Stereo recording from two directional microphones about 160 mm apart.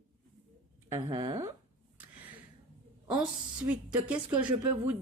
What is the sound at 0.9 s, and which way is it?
Speech, 20° right (ahead or behind).